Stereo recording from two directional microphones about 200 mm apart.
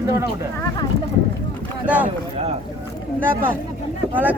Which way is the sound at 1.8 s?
5° right (ahead or behind).